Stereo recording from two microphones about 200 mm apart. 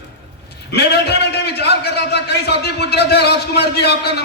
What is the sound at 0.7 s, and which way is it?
A man's voice, 55° left (ahead or behind).